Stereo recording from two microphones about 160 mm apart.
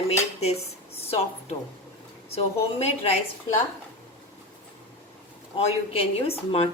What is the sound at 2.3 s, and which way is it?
Speech, 40° left (ahead or behind).